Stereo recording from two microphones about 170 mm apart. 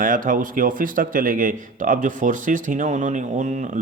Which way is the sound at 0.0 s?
50° right (ahead or behind).